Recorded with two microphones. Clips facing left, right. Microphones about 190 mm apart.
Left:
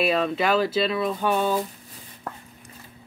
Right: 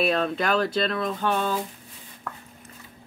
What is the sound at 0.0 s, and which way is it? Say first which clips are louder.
Speech: left 1 dB; centre (ahead or behind).